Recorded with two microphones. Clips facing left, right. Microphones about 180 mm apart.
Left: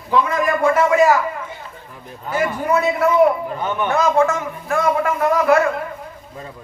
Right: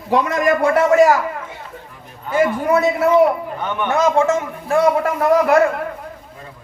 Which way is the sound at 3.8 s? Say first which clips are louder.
Right 1 dB; 25° right (ahead or behind).